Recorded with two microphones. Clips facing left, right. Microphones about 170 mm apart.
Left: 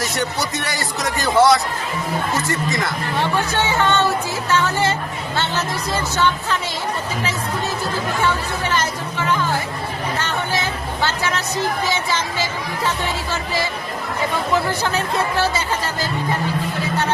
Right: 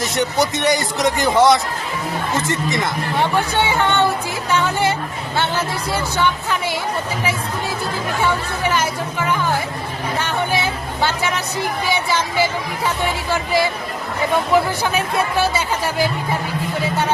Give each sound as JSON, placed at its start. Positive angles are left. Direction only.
{"t": 0.0, "sound": "a woman's voice", "side_deg": -20}
{"t": 8.7, "sound": "a woman's voice", "side_deg": -10}